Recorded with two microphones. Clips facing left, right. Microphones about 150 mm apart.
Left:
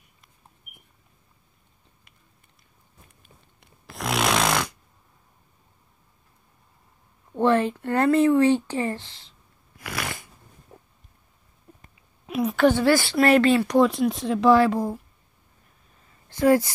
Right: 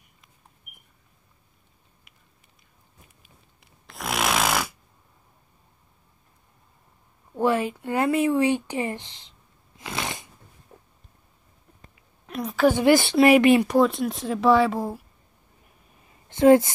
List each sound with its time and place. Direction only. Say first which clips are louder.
3.2 s snoring: left 2 dB; centre (ahead or behind)
7.3 s speech: left 2 dB; 10° right (ahead or behind)
9.8 s shuffling cards: right 1 dB; 20° right (ahead or behind)
12.3 s a woman's voice: left 1 dB; centre (ahead or behind)
12.7 s speech: right 2 dB; 20° right (ahead or behind)
13.7 s speech: left 1 dB; centre (ahead or behind)
16.3 s speech: right 4 dB; 20° right (ahead or behind)